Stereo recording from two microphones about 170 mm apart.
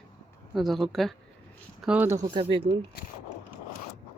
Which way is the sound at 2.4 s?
30° right (ahead or behind).